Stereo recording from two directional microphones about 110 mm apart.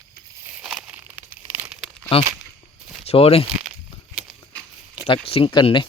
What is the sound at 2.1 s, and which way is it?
Speech, 60° left (ahead or behind).